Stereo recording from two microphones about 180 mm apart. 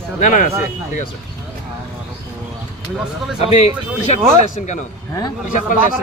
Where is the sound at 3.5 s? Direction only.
35° left (ahead or behind).